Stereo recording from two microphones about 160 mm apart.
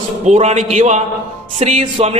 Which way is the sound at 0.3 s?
45° right (ahead or behind).